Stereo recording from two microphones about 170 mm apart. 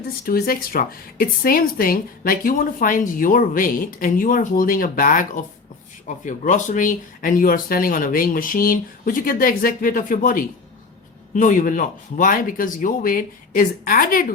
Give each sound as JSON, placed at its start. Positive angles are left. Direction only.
{"t": 0.3, "sound": "speech", "side_deg": 60}